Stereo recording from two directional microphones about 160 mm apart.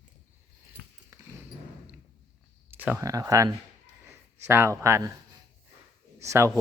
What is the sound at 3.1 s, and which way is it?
Speech, 20° right (ahead or behind).